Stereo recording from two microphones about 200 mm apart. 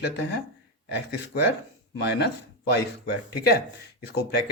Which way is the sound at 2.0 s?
55° left (ahead or behind).